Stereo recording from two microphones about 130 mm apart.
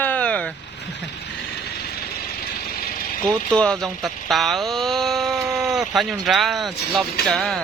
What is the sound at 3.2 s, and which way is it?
Speech, 5° left (ahead or behind).